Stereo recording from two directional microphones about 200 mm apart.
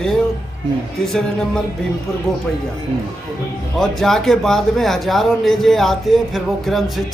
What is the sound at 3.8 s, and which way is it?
Speech, centre (ahead or behind).